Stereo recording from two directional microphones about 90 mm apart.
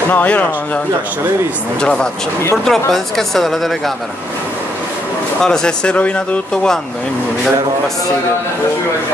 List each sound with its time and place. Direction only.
0.1 s speech: 15° left (ahead or behind)
1.8 s speech: 10° left (ahead or behind)
5.4 s speech: 5° left (ahead or behind)